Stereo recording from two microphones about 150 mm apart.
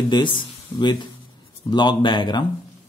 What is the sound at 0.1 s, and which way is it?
A man's voice, 30° left (ahead or behind).